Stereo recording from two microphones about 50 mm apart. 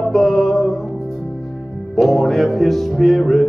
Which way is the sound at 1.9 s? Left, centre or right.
Centre.